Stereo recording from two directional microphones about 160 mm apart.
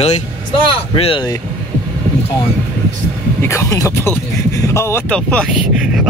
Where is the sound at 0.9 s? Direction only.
35° left (ahead or behind).